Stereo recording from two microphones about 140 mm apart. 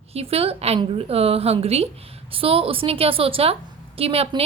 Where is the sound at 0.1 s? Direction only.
45° right (ahead or behind).